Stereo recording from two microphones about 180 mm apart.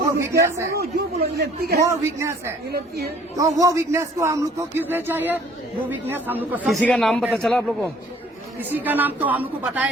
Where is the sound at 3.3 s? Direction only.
20° right (ahead or behind).